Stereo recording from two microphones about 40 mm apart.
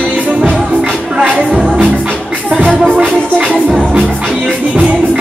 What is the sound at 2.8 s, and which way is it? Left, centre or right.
Music, right.